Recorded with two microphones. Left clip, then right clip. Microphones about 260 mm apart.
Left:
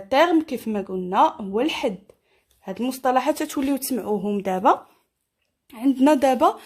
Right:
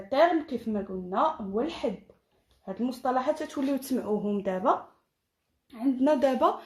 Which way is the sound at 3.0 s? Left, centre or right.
Left.